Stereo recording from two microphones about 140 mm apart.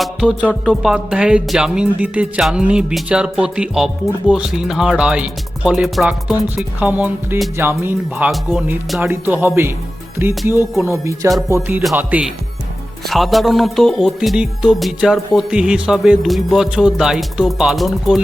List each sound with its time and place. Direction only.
0.0 s music: 5° right (ahead or behind)
0.6 s speech: centre (ahead or behind)
8.3 s speech: centre (ahead or behind)
9.0 s speech: 15° right (ahead or behind)
13.1 s speech: centre (ahead or behind)